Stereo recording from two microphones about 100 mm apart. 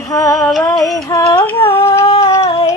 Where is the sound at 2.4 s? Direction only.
75° left (ahead or behind).